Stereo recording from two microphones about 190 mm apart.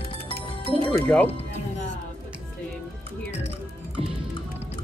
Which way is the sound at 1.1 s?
5° left (ahead or behind).